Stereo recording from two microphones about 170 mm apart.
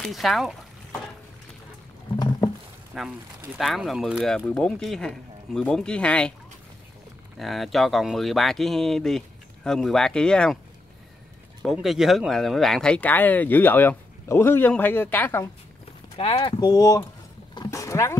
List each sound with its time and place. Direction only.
0.0 s speech: centre (ahead or behind)
2.1 s a sound: 25° left (ahead or behind)
2.9 s speech: centre (ahead or behind)
7.3 s speech: centre (ahead or behind)
11.6 s speech: centre (ahead or behind)
16.2 s speech: 30° left (ahead or behind)
17.6 s roaring cats: 20° left (ahead or behind)